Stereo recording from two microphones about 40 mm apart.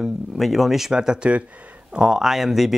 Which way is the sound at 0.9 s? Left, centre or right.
Centre.